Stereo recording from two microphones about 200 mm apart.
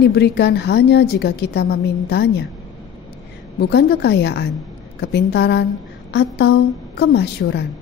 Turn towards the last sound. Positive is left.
turn(degrees=55)  # may be behind; listen again after turning